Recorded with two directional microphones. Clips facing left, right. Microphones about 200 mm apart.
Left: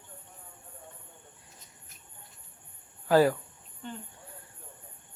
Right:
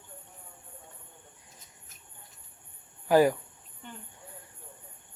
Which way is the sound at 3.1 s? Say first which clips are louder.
Even; 15° right (ahead or behind).